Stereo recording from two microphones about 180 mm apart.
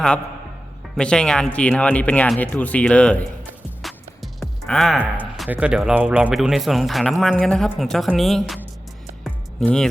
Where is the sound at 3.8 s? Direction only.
Centre (ahead or behind).